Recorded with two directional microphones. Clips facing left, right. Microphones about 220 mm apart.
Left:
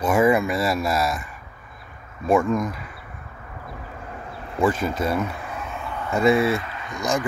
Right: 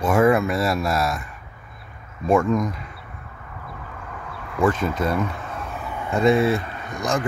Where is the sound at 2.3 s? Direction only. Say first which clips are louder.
Right 1 dB; centre (ahead or behind).